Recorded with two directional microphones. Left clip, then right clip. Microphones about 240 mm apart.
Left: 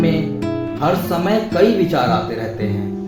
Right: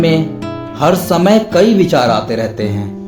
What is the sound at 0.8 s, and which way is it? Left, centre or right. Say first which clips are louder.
Speech: right 8 dB; right.